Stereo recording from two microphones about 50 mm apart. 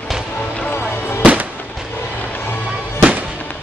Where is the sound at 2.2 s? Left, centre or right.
Left.